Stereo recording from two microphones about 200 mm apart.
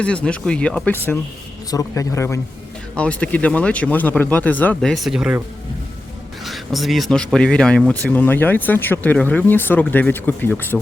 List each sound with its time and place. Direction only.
0.0 s speech: 5° left (ahead or behind)
6.4 s speech: centre (ahead or behind)